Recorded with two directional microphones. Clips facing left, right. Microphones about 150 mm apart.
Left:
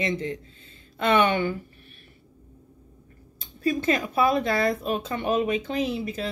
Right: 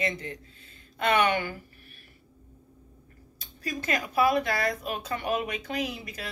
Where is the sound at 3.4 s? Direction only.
25° left (ahead or behind).